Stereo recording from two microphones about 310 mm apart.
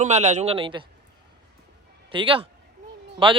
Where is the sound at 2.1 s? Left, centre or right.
Centre.